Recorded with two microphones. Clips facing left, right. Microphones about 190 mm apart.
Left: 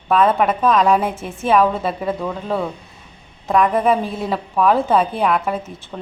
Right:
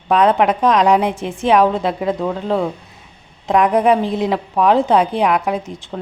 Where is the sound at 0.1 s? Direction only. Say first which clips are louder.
Right 2 dB; 15° right (ahead or behind).